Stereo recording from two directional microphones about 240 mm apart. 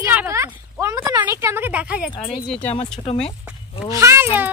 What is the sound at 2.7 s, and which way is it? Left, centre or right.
Speech, left.